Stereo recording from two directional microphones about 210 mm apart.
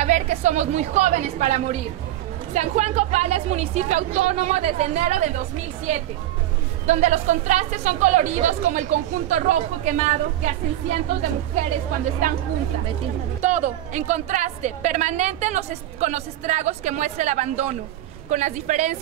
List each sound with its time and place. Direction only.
0.0 s a woman's voice: 35° right (ahead or behind)
6.9 s a woman's voice: 35° right (ahead or behind)
13.4 s a woman's voice: 35° right (ahead or behind)